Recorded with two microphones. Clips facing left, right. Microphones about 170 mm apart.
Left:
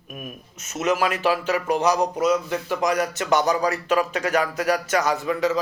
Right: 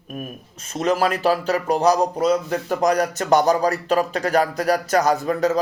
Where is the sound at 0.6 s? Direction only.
30° right (ahead or behind).